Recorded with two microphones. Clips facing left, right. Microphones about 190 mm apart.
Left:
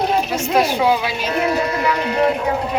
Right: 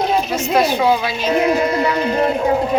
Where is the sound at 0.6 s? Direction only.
10° left (ahead or behind).